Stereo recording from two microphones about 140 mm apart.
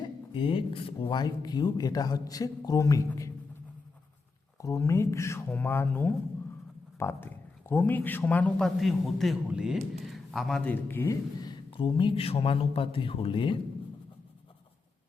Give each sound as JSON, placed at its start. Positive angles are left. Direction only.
{"t": 0.0, "sound": "speech", "side_deg": 40}
{"t": 4.6, "sound": "a man's voice", "side_deg": 20}